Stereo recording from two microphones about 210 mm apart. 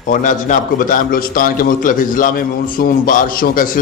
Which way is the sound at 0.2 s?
40° left (ahead or behind).